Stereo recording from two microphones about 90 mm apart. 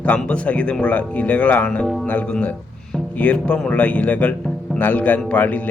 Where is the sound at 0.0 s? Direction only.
15° left (ahead or behind).